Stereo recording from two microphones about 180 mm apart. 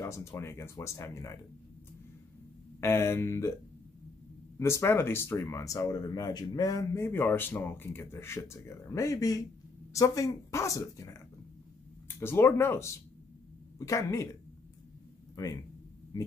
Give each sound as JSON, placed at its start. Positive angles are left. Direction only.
{"t": 0.0, "sound": "speech", "side_deg": 15}
{"t": 2.8, "sound": "speech", "side_deg": 15}
{"t": 4.6, "sound": "speech", "side_deg": 15}